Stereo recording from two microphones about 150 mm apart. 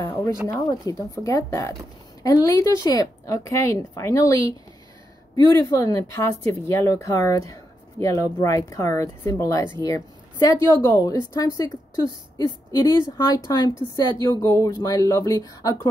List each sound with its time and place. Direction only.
0.0 s a woman's voice: 15° left (ahead or behind)
14.4 s a woman's voice: 20° left (ahead or behind)